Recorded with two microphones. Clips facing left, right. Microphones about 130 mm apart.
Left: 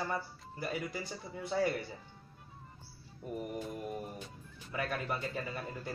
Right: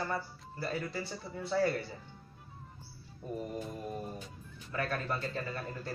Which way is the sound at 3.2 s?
10° left (ahead or behind).